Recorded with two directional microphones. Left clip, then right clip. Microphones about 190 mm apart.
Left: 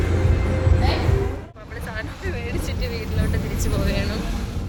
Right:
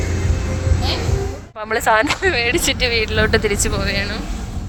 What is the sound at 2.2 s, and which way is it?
Speech, 40° right (ahead or behind).